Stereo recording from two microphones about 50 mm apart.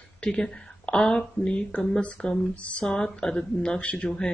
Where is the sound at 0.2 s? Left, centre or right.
Centre.